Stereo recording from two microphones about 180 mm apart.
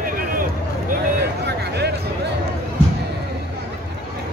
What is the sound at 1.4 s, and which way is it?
Music, 65° right (ahead or behind).